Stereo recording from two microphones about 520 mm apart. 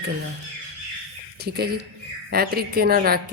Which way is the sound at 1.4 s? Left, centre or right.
Centre.